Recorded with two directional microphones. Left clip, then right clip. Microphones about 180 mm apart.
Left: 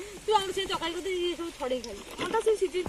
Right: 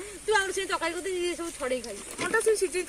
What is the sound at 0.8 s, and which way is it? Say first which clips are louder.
Speech: right 1 dB; 20° left (ahead or behind).